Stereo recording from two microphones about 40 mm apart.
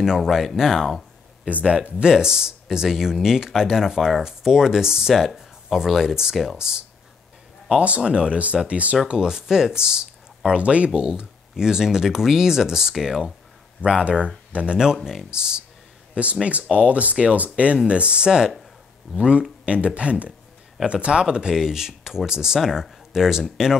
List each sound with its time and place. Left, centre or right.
0.0 s speech: centre
1.5 s speech: right
8.0 s speech: right
8.6 s speech: right
9.2 s speech: centre
10.6 s speech: right
11.0 s speech: right
13.8 s speech: right
15.0 s speech: centre
21.5 s speech: centre